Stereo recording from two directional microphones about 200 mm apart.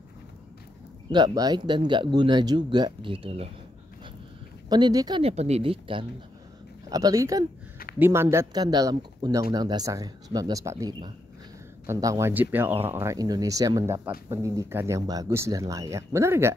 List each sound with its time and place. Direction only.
1.1 s speech: 20° right (ahead or behind)
4.6 s speech: 20° right (ahead or behind)
5.2 s speech: 30° right (ahead or behind); by 16.5 s 15° right (ahead or behind)